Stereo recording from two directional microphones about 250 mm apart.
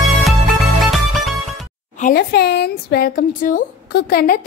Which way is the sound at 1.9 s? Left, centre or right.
Left.